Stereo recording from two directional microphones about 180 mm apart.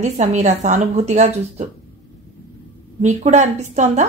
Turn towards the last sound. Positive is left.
turn(degrees=-40)  # may be behind; listen again after turning